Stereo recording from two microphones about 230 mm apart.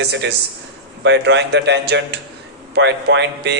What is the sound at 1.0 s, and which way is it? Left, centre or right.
A man's voice, right.